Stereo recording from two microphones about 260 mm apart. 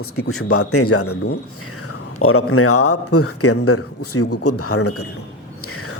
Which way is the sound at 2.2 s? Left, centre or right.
Left.